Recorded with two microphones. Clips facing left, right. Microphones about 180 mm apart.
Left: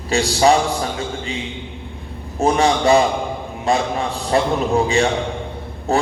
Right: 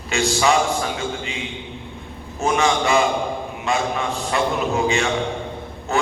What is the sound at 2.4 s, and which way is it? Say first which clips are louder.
A man's voice: left 4 dB; 35° left (ahead or behind).